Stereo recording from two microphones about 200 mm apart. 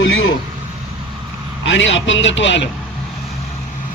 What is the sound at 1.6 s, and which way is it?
Speech, 70° left (ahead or behind).